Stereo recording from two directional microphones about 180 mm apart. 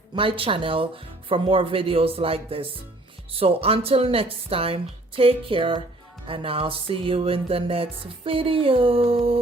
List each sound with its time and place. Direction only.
0.2 s speech: 30° right (ahead or behind)
1.3 s music: 30° right (ahead or behind)